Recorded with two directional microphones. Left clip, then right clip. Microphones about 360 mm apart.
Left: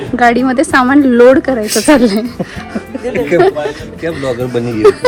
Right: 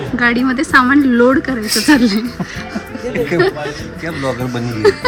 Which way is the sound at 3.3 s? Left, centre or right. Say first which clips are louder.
Left 6 dB; centre.